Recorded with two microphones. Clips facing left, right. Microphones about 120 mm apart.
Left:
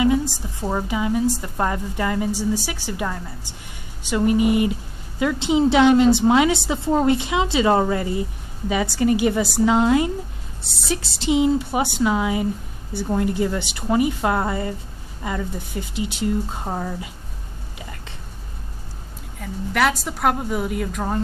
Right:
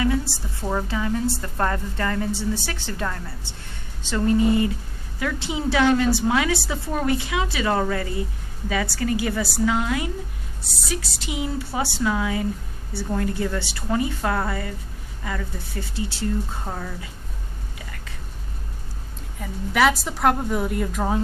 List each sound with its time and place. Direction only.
0.0 s a woman's voice: 15° left (ahead or behind)
19.4 s a woman's voice: centre (ahead or behind)